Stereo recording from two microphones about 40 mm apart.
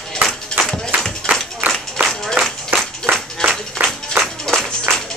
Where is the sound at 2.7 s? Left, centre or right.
Right.